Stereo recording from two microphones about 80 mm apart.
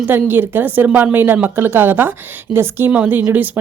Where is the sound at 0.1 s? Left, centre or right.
Right.